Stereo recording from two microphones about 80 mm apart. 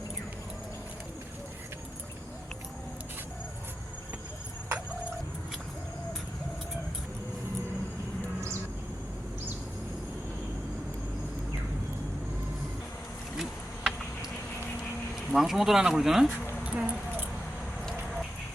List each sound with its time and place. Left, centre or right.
13.3 s a sound: centre
15.1 s speech: centre
16.6 s keys jangling: centre